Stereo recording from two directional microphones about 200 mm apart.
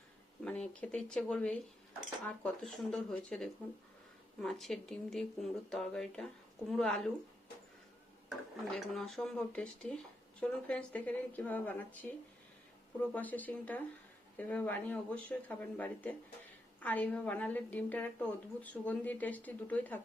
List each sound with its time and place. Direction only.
0.4 s speech: 5° left (ahead or behind)
8.7 s a woman's voice: centre (ahead or behind)